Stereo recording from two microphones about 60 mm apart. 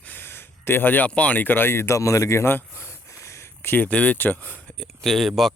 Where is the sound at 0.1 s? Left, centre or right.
Left.